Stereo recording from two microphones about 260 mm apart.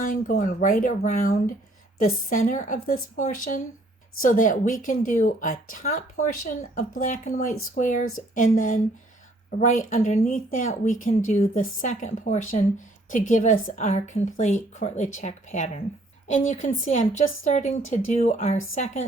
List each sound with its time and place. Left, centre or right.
0.0 s a woman's voice: left